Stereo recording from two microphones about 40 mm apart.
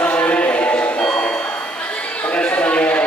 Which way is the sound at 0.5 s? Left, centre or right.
Left.